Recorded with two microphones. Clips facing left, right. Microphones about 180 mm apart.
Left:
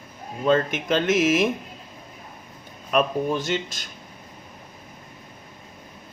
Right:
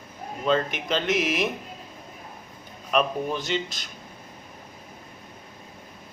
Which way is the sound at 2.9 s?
50° left (ahead or behind).